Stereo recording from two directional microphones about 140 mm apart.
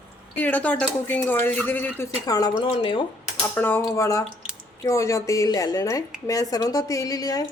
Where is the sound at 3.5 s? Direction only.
15° left (ahead or behind).